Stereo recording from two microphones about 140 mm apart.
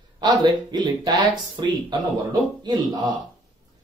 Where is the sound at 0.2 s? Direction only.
30° right (ahead or behind).